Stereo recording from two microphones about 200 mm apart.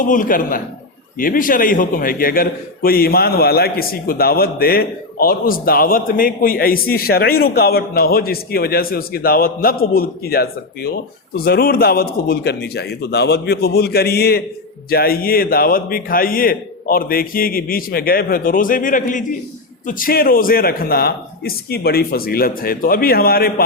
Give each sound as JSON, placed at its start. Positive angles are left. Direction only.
{"t": 0.0, "sound": "a man's voice", "side_deg": 40}